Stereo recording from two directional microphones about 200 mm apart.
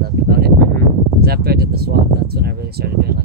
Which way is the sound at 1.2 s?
50° right (ahead or behind).